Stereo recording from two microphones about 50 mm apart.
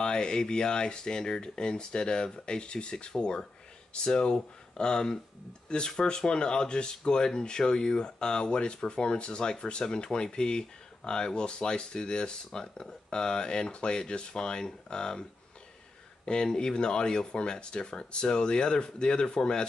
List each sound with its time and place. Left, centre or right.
0.0 s speech: centre
16.3 s speech: centre